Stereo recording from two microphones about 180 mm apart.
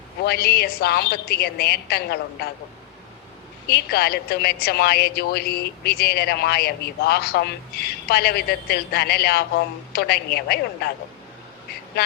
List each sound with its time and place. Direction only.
0.3 s a woman's voice: 60° left (ahead or behind)
3.7 s a woman's voice: 60° left (ahead or behind)
12.0 s speech: 60° left (ahead or behind)